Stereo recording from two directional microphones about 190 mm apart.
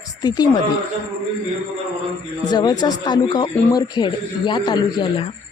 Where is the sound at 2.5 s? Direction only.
20° left (ahead or behind).